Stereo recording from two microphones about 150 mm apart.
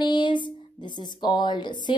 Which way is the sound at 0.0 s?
30° left (ahead or behind).